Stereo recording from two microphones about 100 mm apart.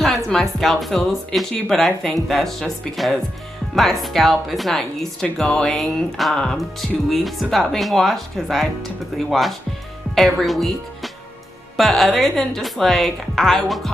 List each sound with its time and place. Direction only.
0.0 s a woman's voice: 5° left (ahead or behind)